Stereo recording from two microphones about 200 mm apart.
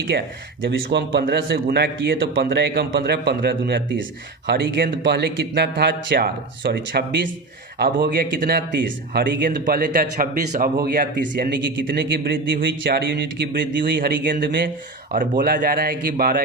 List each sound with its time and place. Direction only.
0.1 s a man's voice: 50° right (ahead or behind)
14.4 s a man's voice: 60° right (ahead or behind)
15.1 s a man's voice: 45° right (ahead or behind)